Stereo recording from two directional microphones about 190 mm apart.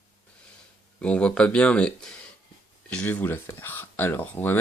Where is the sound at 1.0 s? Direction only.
5° left (ahead or behind).